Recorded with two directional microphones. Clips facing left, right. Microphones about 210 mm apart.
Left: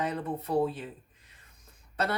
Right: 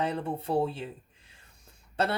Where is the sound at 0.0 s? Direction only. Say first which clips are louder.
Right 1 dB; 30° right (ahead or behind).